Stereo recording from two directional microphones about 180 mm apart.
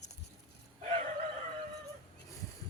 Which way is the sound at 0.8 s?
50° right (ahead or behind).